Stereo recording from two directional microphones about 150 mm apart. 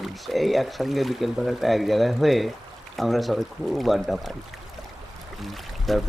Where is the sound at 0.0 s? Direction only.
Centre (ahead or behind).